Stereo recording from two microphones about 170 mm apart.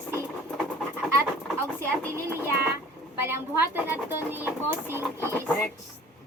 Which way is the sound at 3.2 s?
15° right (ahead or behind).